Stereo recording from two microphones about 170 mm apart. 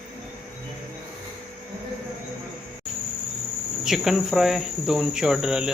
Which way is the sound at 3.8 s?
Centre (ahead or behind).